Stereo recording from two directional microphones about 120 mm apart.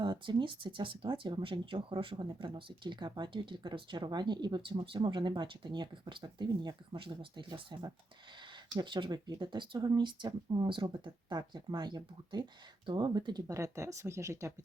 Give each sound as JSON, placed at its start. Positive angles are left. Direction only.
{"t": 0.0, "sound": "speech", "side_deg": -40}
{"t": 13.5, "sound": "speech", "side_deg": -25}